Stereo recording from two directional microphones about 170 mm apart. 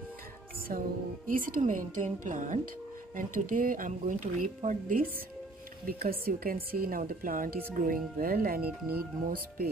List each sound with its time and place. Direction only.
0.7 s a woman's voice: 55° right (ahead or behind)
5.9 s speech: 60° right (ahead or behind)